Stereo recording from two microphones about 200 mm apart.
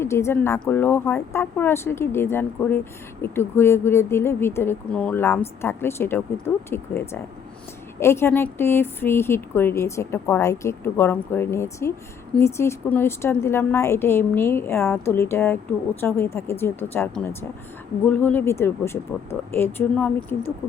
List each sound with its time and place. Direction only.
0.0 s speech: 15° left (ahead or behind)